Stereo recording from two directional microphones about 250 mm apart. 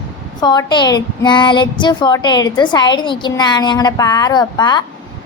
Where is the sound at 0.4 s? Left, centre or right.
Centre.